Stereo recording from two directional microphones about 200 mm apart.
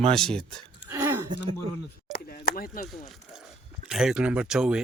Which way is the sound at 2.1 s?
50° left (ahead or behind).